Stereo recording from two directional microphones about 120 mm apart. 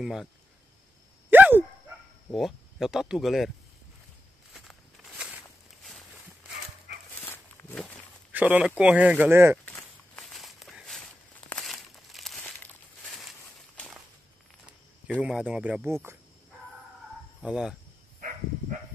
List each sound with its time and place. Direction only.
0.0 s speech: centre (ahead or behind)
1.3 s dog: 15° right (ahead or behind)
2.3 s speech: centre (ahead or behind)
4.6 s walk: centre (ahead or behind)
7.2 s dog: 15° left (ahead or behind)
8.3 s speech: 15° right (ahead or behind)
9.8 s walk: 5° left (ahead or behind)
11.4 s crumpling: 5° left (ahead or behind)
12.5 s a sound: 15° left (ahead or behind)
13.1 s a sound: centre (ahead or behind)
15.1 s speech: 10° right (ahead or behind)
15.9 s speech: 20° right (ahead or behind)
17.4 s speech: 5° right (ahead or behind)